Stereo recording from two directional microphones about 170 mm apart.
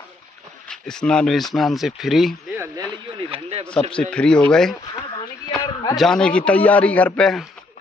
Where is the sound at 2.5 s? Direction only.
15° right (ahead or behind).